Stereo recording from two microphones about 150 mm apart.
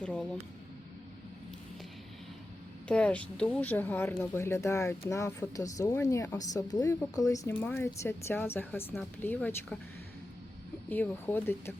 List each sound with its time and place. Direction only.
0.0 s speech: 5° left (ahead or behind)
2.8 s speech: 10° left (ahead or behind)
10.8 s speech: 10° left (ahead or behind)